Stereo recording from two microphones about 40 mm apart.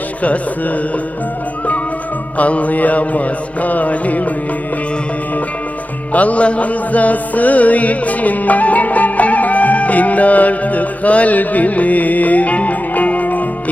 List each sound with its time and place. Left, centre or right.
2.4 s music: left
6.1 s music: left